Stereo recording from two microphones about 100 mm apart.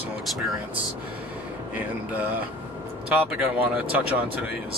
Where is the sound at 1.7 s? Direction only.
15° right (ahead or behind).